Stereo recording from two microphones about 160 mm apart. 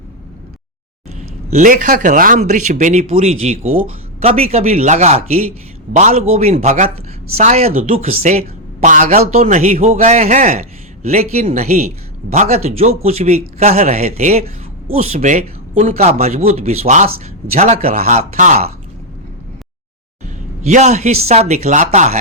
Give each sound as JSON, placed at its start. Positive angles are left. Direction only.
{"t": 1.5, "sound": "a man's voice", "side_deg": -50}
{"t": 2.4, "sound": "a man's voice", "side_deg": -45}
{"t": 9.3, "sound": "a man's voice", "side_deg": -45}
{"t": 11.0, "sound": "a man's voice", "side_deg": -40}
{"t": 20.2, "sound": "speech", "side_deg": -50}